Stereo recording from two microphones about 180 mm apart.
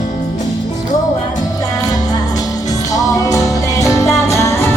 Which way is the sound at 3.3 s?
20° left (ahead or behind).